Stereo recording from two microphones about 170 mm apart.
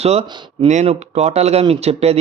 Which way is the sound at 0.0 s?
40° right (ahead or behind).